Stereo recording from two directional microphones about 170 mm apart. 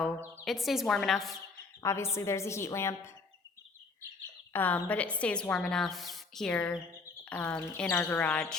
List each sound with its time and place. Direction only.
0.4 s a woman's voice: centre (ahead or behind)
1.8 s a woman's voice: 15° left (ahead or behind)
4.5 s a woman's voice: 10° left (ahead or behind)